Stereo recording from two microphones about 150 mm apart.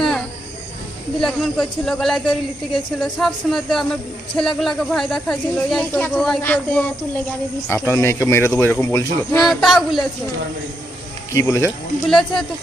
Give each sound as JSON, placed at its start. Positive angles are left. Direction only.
{"t": 1.2, "sound": "speech", "side_deg": 0}
{"t": 9.5, "sound": "speech", "side_deg": 0}
{"t": 11.3, "sound": "speech", "side_deg": 20}
{"t": 12.0, "sound": "speech", "side_deg": 0}